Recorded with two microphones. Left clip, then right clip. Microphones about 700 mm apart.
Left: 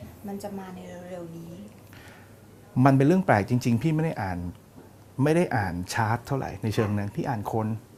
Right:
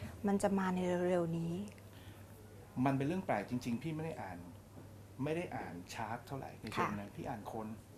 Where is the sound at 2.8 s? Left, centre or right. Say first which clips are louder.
Left 15 dB; left.